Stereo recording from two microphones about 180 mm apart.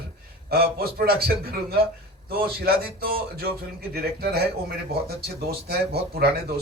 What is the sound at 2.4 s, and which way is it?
A man's voice, 55° right (ahead or behind).